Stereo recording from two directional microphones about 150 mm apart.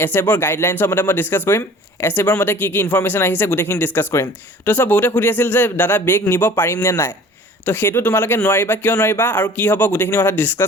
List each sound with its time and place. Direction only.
0.0 s speech: 15° left (ahead or behind)